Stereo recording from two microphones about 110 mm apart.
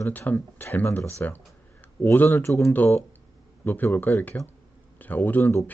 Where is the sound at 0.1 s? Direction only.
15° left (ahead or behind).